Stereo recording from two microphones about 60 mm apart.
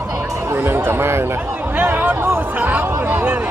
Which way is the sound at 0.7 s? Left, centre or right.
Right.